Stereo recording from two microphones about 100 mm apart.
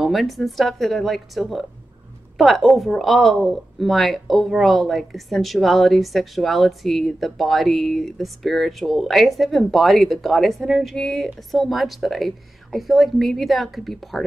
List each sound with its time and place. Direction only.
0.0 s a woman's voice: centre (ahead or behind)